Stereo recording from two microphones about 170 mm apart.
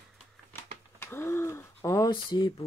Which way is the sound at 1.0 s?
15° left (ahead or behind).